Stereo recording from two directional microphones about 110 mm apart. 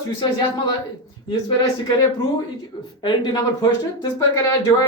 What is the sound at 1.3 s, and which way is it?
Speech, 35° left (ahead or behind).